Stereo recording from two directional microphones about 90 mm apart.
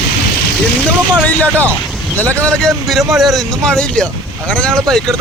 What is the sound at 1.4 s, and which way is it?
Speech, 15° left (ahead or behind).